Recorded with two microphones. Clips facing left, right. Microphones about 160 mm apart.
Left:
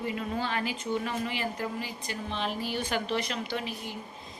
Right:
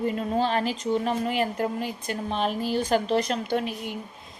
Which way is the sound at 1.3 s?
55° right (ahead or behind).